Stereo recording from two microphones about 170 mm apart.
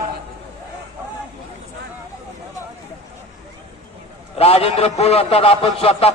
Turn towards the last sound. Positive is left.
turn(degrees=35)  # may be behind; listen again after turning